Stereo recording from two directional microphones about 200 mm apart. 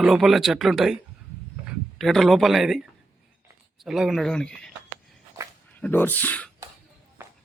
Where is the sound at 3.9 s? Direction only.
Centre (ahead or behind).